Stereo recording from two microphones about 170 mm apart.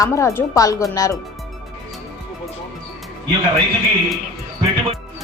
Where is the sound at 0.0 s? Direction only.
20° left (ahead or behind).